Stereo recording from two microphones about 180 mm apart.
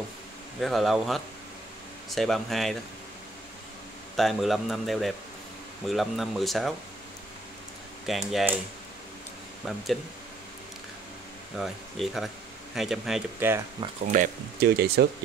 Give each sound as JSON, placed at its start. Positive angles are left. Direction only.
{"t": 0.6, "sound": "speech", "side_deg": 0}
{"t": 4.2, "sound": "speech", "side_deg": 0}
{"t": 8.1, "sound": "speech", "side_deg": 0}
{"t": 9.6, "sound": "speech", "side_deg": 0}
{"t": 11.5, "sound": "speech", "side_deg": 0}
{"t": 14.6, "sound": "speech", "side_deg": -65}